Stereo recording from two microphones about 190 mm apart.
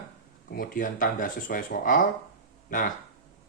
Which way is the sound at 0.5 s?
50° left (ahead or behind).